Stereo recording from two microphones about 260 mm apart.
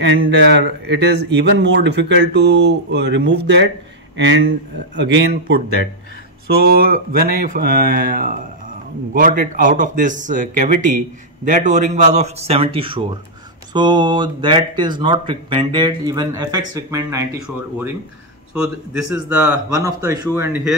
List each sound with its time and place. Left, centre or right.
0.0 s a man's voice: right; by 17.2 s centre
19.2 s speech: centre